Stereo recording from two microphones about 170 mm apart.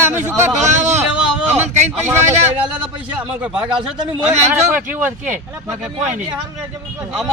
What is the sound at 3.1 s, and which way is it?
Speech, 5° right (ahead or behind).